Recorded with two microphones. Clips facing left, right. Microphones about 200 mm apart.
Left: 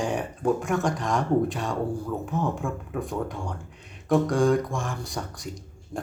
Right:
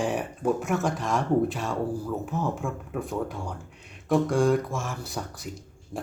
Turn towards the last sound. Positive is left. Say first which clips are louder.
# left 1 dB
turn(degrees=-5)  # may be behind; listen again after turning